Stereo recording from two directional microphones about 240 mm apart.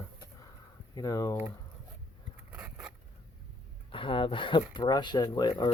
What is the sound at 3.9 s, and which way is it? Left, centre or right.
Speech, left.